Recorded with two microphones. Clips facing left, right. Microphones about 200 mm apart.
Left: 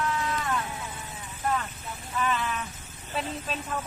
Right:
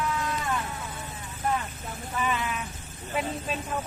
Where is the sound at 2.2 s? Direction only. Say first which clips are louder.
Left 1 dB; 10° right (ahead or behind).